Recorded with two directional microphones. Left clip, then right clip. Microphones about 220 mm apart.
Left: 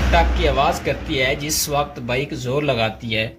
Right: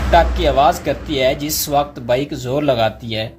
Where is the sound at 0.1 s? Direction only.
65° right (ahead or behind).